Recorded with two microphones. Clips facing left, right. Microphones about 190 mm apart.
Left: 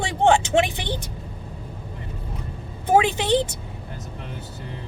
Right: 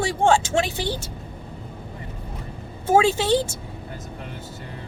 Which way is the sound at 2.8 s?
15° left (ahead or behind).